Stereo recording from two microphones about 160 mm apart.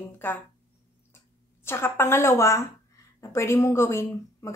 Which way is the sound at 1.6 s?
15° left (ahead or behind).